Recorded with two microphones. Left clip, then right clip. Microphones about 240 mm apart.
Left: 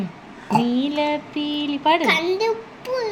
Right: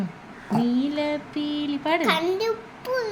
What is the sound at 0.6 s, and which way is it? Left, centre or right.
Speech, centre.